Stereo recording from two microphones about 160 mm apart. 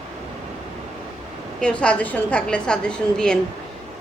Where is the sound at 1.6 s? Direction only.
5° left (ahead or behind).